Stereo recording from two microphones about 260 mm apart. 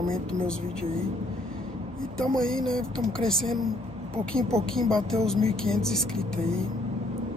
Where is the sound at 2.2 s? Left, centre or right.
Centre.